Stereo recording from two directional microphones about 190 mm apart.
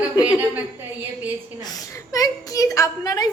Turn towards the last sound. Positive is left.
turn(degrees=20)  # may be behind; listen again after turning